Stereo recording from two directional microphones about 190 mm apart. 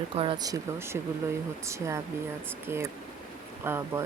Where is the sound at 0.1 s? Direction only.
30° right (ahead or behind).